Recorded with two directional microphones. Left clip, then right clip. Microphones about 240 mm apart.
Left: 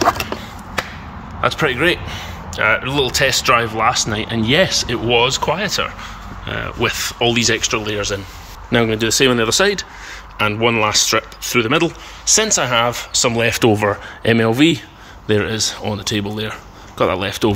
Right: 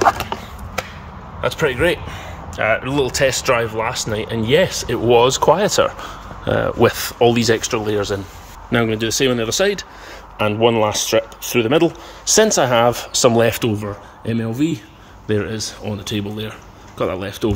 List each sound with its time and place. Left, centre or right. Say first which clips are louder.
1.4 s speech: left 1 dB; centre
5.0 s speech: right 4 dB; right
8.6 s speech: left 2 dB; centre
12.3 s speech: right 2 dB; right
13.6 s speech: left 8 dB; centre